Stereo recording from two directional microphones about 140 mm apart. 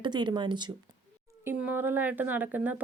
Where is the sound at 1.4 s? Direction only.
10° right (ahead or behind).